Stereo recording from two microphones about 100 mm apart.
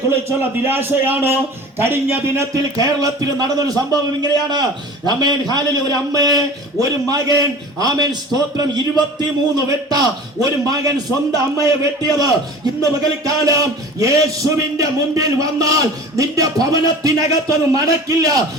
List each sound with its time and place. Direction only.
0.1 s a man's voice: 25° right (ahead or behind)
2.7 s a man's voice: 40° right (ahead or behind)